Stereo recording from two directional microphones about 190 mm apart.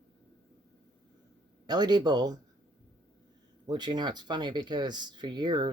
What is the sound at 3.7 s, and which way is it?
Speech, 20° right (ahead or behind).